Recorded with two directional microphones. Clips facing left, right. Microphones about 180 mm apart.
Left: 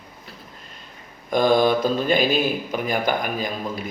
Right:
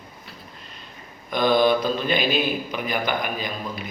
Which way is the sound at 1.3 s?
45° left (ahead or behind).